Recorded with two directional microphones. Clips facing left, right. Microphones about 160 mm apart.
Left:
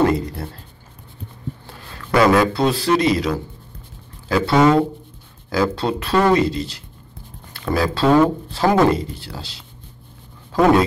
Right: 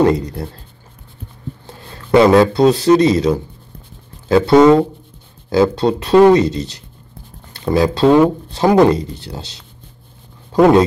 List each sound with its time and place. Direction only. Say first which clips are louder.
0.0 s speech: right 4 dB; 20° right (ahead or behind)
1.7 s speech: right 8 dB; 25° right (ahead or behind)